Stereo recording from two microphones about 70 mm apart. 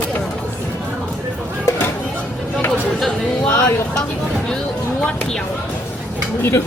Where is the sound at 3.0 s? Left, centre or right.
Centre.